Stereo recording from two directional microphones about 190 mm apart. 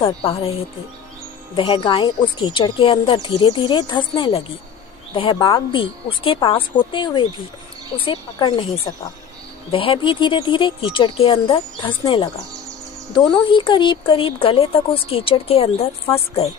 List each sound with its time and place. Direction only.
0.0 s a woman's voice: 30° left (ahead or behind)
1.5 s a woman's voice: 25° left (ahead or behind)